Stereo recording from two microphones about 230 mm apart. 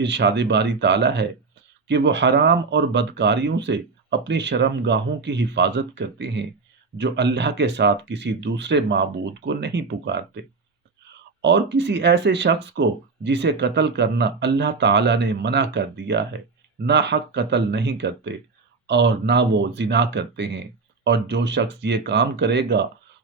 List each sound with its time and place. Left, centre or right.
0.0 s speech: right
11.4 s speech: right